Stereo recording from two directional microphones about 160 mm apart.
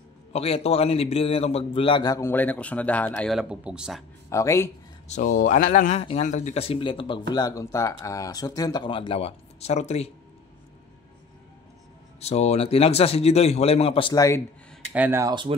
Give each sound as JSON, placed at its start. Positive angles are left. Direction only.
{"t": 0.3, "sound": "a man's voice", "side_deg": 40}
{"t": 4.3, "sound": "speech", "side_deg": 20}
{"t": 5.1, "sound": "speech", "side_deg": 55}
{"t": 12.2, "sound": "speech", "side_deg": 40}
{"t": 14.9, "sound": "speech", "side_deg": -10}